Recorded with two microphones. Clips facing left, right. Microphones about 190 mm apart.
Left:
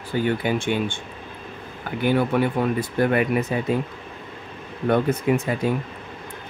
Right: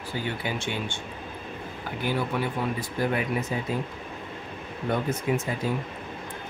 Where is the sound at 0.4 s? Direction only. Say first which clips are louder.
Left 8 dB; 55° left (ahead or behind).